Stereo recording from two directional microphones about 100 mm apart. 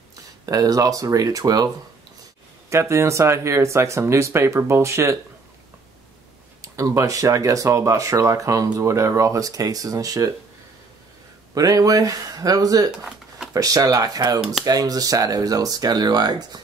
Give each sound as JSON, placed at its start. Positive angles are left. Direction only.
{"t": 0.5, "sound": "speech", "side_deg": -40}
{"t": 2.7, "sound": "speech", "side_deg": -30}
{"t": 6.6, "sound": "speech", "side_deg": -30}
{"t": 11.5, "sound": "speech", "side_deg": -35}